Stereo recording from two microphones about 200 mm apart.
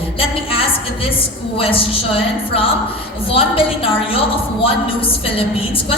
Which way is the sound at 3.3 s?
30° left (ahead or behind).